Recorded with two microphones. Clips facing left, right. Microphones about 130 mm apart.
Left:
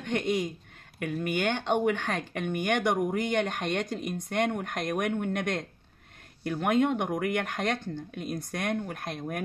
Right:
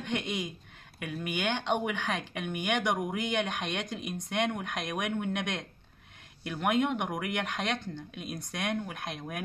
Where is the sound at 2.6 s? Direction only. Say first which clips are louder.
Left 3 dB; 50° left (ahead or behind).